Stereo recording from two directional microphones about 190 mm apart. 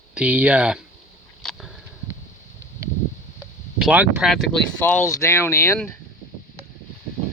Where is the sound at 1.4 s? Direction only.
Centre (ahead or behind).